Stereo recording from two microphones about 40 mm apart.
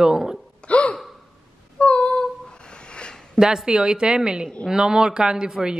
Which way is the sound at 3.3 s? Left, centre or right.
Centre.